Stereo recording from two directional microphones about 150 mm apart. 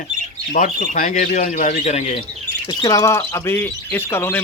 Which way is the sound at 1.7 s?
45° left (ahead or behind).